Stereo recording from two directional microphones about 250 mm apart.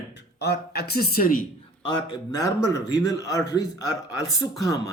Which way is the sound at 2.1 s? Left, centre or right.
Centre.